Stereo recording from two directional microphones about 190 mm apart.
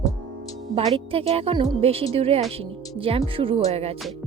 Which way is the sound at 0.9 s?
30° right (ahead or behind).